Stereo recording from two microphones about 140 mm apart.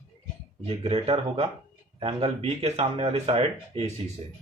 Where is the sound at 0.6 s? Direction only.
45° right (ahead or behind).